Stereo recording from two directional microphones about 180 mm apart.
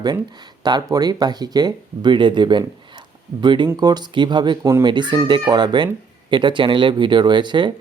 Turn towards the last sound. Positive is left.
turn(degrees=-25)  # may be behind; listen again after turning